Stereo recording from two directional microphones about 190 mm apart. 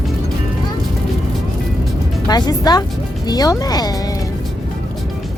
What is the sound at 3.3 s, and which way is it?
Speech, 20° left (ahead or behind).